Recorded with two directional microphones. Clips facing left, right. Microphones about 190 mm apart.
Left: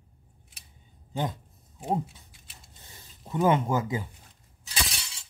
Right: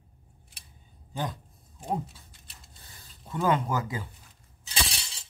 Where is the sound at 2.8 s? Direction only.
20° left (ahead or behind).